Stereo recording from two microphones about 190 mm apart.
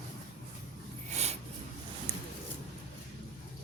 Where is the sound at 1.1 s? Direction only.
35° right (ahead or behind).